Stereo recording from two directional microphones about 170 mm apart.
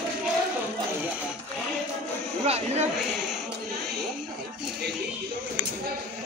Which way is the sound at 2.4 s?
40° right (ahead or behind).